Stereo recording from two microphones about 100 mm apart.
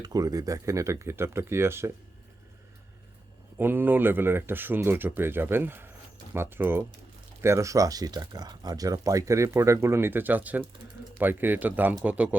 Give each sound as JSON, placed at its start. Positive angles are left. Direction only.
{"t": 0.0, "sound": "speech", "side_deg": -40}
{"t": 3.6, "sound": "speech", "side_deg": -20}